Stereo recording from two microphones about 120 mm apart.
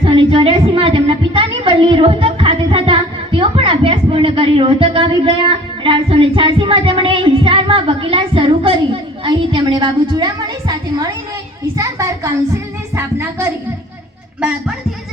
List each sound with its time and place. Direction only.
0.0 s a woman's voice: 45° right (ahead or behind)
11.8 s a sound: 25° right (ahead or behind)
13.0 s speech: 25° right (ahead or behind)